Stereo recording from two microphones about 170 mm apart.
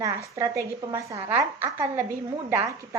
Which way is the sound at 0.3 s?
20° right (ahead or behind).